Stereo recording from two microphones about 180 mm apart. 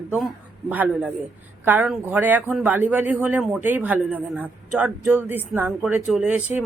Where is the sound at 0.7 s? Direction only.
10° right (ahead or behind).